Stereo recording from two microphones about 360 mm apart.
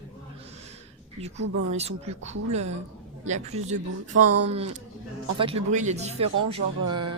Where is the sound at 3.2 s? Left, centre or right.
Centre.